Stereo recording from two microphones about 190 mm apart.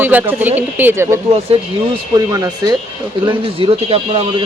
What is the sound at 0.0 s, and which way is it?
Speech, 10° right (ahead or behind).